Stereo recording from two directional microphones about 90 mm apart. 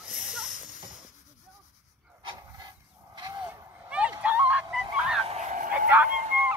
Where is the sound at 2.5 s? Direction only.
50° right (ahead or behind).